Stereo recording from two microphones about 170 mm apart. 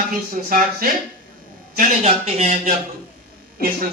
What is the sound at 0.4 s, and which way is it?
Speech, 55° right (ahead or behind).